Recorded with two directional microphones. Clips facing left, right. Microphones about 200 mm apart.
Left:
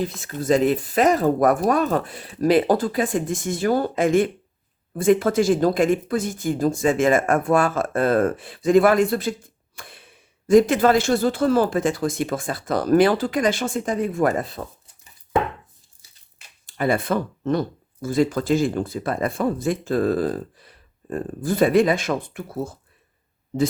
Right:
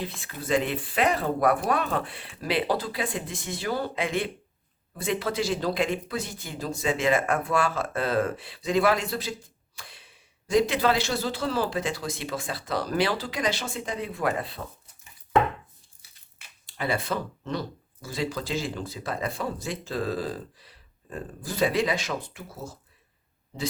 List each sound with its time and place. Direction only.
0.0 s speech: 45° left (ahead or behind)
16.6 s speech: 50° left (ahead or behind)